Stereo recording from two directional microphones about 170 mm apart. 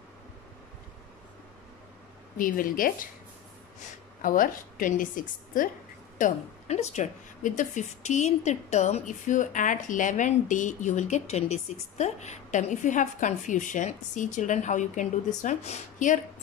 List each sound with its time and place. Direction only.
2.3 s a woman's voice: 55° left (ahead or behind)